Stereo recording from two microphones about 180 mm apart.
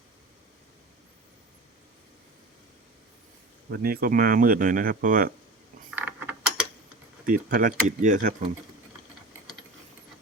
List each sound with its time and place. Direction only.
3.7 s speech: 55° right (ahead or behind)
6.0 s mechanisms: 10° right (ahead or behind)
7.3 s speech: 50° right (ahead or behind)